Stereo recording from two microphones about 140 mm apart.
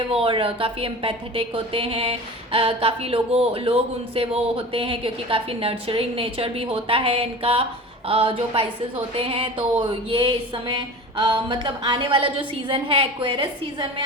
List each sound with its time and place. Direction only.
0.1 s a woman's voice: 40° right (ahead or behind)